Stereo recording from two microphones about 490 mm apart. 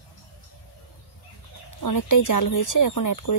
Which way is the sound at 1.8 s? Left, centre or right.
Left.